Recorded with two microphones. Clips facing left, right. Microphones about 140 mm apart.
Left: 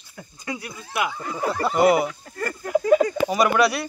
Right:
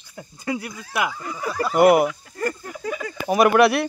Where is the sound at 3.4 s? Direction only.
55° right (ahead or behind).